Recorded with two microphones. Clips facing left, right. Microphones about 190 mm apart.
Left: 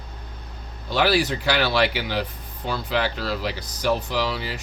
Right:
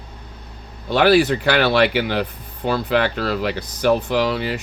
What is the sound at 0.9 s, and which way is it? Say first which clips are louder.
Speech: right 6 dB; 55° right (ahead or behind).